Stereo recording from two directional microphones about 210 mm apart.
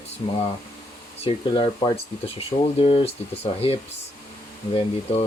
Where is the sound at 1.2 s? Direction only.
25° left (ahead or behind).